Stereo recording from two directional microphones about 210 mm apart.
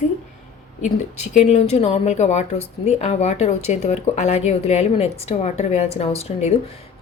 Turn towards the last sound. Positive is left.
turn(degrees=30)  # may be behind; listen again after turning